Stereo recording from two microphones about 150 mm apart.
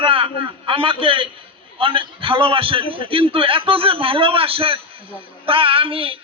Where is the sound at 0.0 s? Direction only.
35° right (ahead or behind).